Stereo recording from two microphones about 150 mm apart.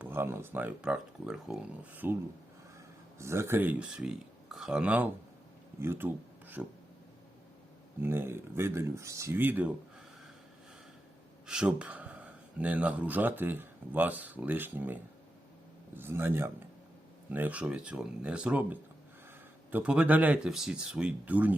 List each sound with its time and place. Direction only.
0.0 s speech: 15° right (ahead or behind)
3.2 s speech: 15° right (ahead or behind)
8.0 s speech: 15° right (ahead or behind)
11.4 s speech: 5° right (ahead or behind)
16.0 s speech: 15° right (ahead or behind)